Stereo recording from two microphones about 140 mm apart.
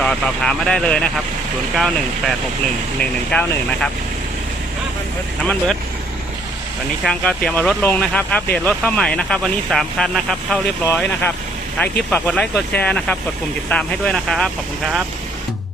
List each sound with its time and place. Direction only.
0.0 s speech: 5° left (ahead or behind)
7.0 s speech: 5° left (ahead or behind)